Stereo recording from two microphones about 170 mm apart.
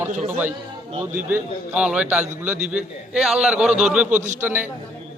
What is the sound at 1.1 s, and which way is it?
A man's voice, 10° right (ahead or behind).